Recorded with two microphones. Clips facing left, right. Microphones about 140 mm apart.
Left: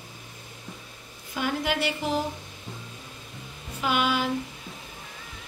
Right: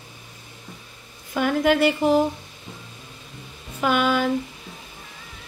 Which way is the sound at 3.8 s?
50° right (ahead or behind).